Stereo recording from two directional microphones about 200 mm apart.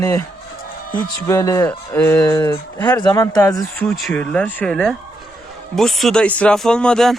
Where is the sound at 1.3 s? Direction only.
15° left (ahead or behind).